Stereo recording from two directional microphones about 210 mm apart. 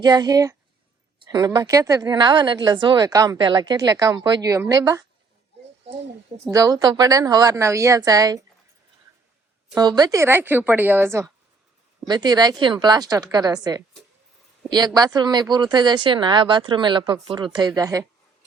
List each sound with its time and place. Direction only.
0.0 s speech: 20° right (ahead or behind)
6.5 s speech: 15° right (ahead or behind)
9.7 s speech: 20° right (ahead or behind)